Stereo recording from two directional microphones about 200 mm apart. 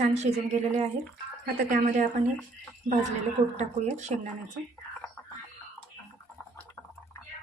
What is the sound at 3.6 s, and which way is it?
Speech, 35° right (ahead or behind).